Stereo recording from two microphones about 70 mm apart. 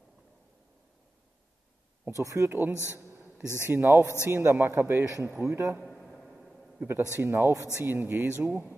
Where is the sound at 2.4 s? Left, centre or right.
Right.